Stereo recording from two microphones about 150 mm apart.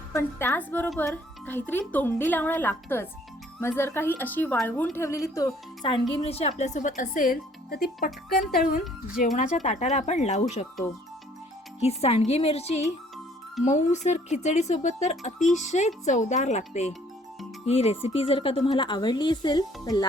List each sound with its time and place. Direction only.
0.1 s a child's voice: 15° left (ahead or behind); by 8.8 s 80° left
9.1 s speech: 55° left (ahead or behind)
11.8 s a woman's voice: 45° left (ahead or behind); by 20.1 s 25° left (ahead or behind)